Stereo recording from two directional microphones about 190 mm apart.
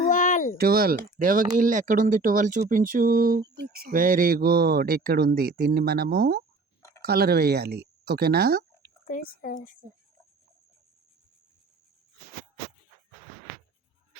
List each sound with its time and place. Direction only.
0.1 s a sound: 45° left (ahead or behind)
0.5 s speech: 55° right (ahead or behind)
9.0 s speech: 45° left (ahead or behind)